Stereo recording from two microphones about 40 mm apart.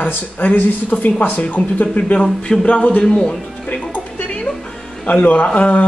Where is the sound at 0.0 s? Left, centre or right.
Left.